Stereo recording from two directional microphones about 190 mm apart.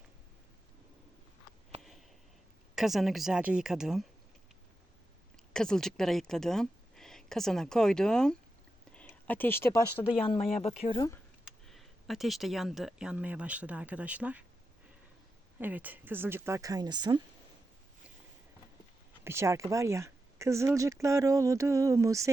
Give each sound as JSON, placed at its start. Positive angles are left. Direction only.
{"t": 1.8, "sound": "a sound", "side_deg": 0}
{"t": 2.7, "sound": "speech", "side_deg": 0}
{"t": 5.5, "sound": "a woman's voice", "side_deg": 5}
{"t": 10.1, "sound": "speech", "side_deg": 30}
{"t": 11.6, "sound": "speech", "side_deg": 0}
{"t": 15.5, "sound": "speech", "side_deg": -10}
{"t": 19.2, "sound": "speech", "side_deg": -15}